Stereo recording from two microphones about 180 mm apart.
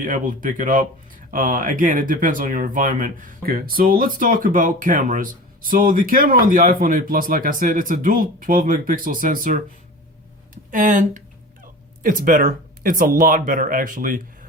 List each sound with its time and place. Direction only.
0.0 s speech: 50° right (ahead or behind)